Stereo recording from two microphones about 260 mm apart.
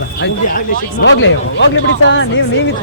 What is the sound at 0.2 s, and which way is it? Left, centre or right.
Speech, left.